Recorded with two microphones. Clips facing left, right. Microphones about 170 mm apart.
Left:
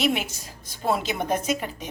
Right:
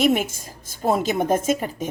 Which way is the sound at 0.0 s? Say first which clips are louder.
Right 5 dB; 50° right (ahead or behind).